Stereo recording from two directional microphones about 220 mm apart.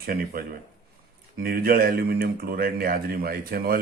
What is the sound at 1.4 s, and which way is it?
A man's voice, 45° right (ahead or behind).